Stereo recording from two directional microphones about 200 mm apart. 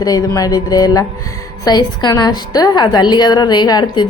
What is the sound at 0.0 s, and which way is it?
A woman's voice, 20° left (ahead or behind).